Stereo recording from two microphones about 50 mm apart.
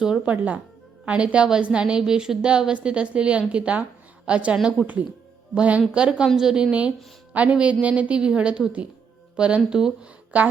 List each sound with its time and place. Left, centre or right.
0.3 s a woman's voice: right; by 6.7 s centre
6.7 s a woman's voice: right